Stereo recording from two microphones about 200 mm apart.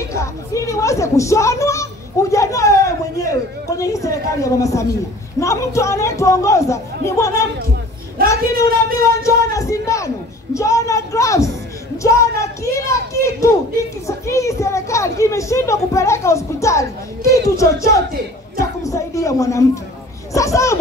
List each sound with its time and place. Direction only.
0.1 s a sound: 15° left (ahead or behind)
5.4 s speech: 15° left (ahead or behind)
8.6 s speech: 45° right (ahead or behind)
9.2 s speech: 15° left (ahead or behind)
12.9 s a sound: 15° left (ahead or behind)
14.0 s speech: 15° left (ahead or behind)